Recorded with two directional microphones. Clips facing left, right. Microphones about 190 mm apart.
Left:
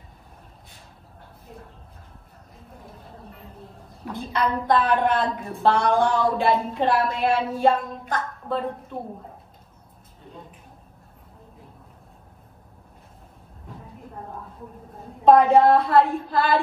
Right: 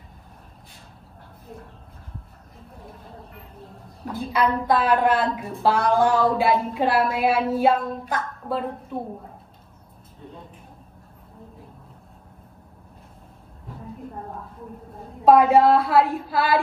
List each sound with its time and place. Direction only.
4.1 s a woman's voice: 5° right (ahead or behind)
15.2 s a woman's voice: 5° right (ahead or behind)